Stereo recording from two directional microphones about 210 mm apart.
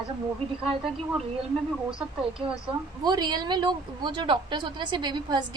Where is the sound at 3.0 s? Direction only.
20° right (ahead or behind).